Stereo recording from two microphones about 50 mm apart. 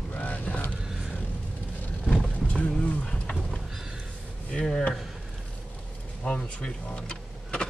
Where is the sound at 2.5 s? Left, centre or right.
Left.